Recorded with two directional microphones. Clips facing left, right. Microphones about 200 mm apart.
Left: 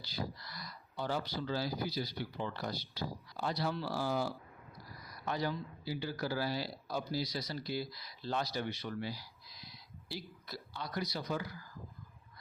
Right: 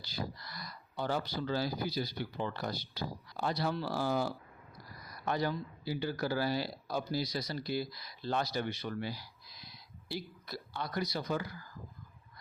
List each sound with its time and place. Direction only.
0.1 s speech: 50° right (ahead or behind)